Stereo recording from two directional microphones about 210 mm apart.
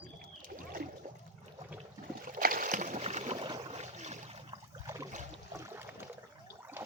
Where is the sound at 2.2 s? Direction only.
40° right (ahead or behind).